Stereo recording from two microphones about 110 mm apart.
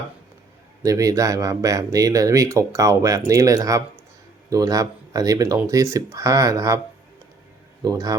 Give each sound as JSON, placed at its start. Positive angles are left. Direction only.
{"t": 0.8, "sound": "speech", "side_deg": -30}
{"t": 7.8, "sound": "speech", "side_deg": -35}